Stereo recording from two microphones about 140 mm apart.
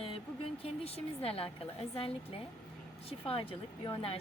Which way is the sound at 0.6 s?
45° left (ahead or behind).